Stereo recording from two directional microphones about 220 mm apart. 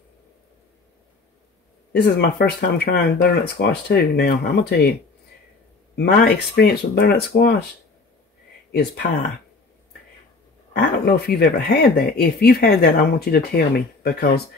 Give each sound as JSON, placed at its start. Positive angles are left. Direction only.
{"t": 1.9, "sound": "speech", "side_deg": 45}
{"t": 5.9, "sound": "speech", "side_deg": 50}
{"t": 10.8, "sound": "speech", "side_deg": 45}